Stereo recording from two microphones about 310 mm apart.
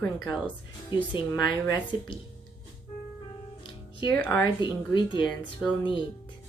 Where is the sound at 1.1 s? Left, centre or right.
Centre.